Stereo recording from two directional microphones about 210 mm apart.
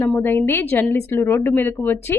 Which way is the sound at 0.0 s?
10° left (ahead or behind).